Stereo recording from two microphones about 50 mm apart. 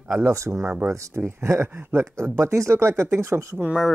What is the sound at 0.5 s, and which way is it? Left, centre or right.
Speech, right.